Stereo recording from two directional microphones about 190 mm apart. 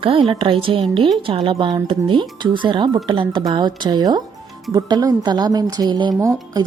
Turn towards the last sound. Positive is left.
turn(degrees=-20)  # may be behind; listen again after turning